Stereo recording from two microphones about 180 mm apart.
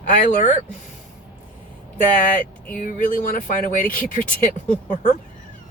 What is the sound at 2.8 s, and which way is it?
Speech, 45° left (ahead or behind).